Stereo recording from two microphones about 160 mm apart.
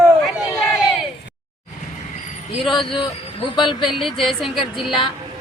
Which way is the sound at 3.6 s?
30° left (ahead or behind).